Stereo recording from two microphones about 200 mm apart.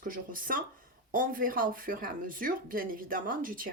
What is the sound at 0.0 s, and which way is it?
Speech, 45° right (ahead or behind).